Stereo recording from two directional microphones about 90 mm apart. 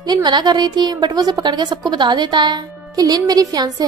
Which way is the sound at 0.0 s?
55° right (ahead or behind).